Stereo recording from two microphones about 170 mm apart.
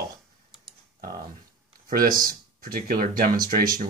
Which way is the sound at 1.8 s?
55° right (ahead or behind).